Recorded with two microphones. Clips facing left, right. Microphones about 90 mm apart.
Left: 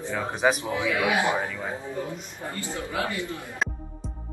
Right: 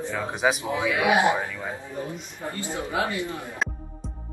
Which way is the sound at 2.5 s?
20° right (ahead or behind).